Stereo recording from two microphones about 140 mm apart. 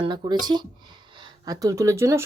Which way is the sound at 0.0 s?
30° right (ahead or behind).